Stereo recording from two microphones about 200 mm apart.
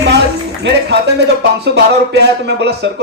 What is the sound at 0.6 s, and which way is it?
Speech, 60° right (ahead or behind).